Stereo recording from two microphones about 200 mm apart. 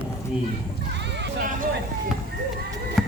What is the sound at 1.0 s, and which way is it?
Vehicle, 60° right (ahead or behind).